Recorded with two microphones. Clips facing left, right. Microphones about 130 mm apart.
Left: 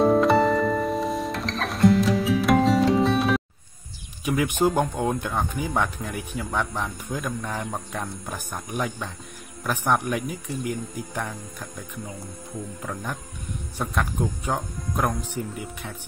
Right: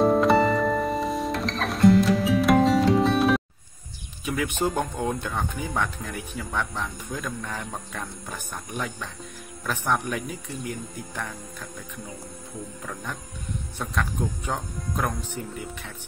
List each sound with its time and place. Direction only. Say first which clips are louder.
0.0 s music: left 1 dB; centre (ahead or behind)
4.2 s speech: left 4 dB; 15° left (ahead or behind)
12.8 s speech: left 3 dB; 15° left (ahead or behind)